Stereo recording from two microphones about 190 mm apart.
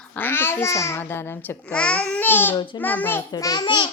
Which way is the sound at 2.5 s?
25° left (ahead or behind).